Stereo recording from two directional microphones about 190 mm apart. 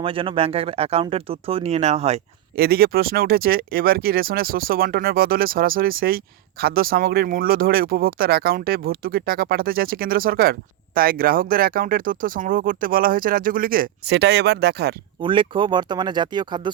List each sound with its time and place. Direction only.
0.0 s speech: 30° right (ahead or behind)
2.6 s speech: 55° right (ahead or behind)
15.2 s speech: 25° right (ahead or behind)